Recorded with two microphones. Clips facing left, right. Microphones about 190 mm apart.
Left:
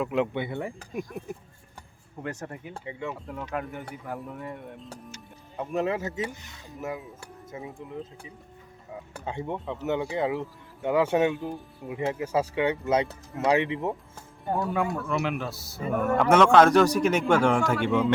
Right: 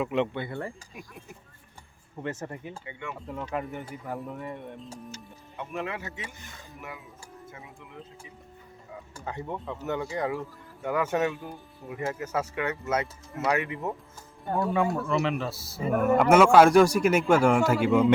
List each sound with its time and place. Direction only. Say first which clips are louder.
0.0 s speech: left 1 dB; centre (ahead or behind)
0.3 s speech: left 3 dB; 20° left (ahead or behind)
0.8 s speech: left 11 dB; 45° left (ahead or behind)
2.2 s speech: right 1 dB; centre (ahead or behind)
5.5 s speech: left 7 dB; 35° left (ahead or behind)
7.5 s speech: left 13 dB; 30° left (ahead or behind)
9.2 s speech: left 2 dB; 20° left (ahead or behind)
12.5 s speech: left 5 dB; 30° left (ahead or behind)
13.3 s speech: left 4 dB; 20° left (ahead or behind)
14.5 s speech: right 1 dB; centre (ahead or behind)